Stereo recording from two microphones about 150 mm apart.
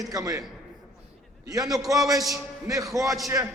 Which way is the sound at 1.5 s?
25° right (ahead or behind).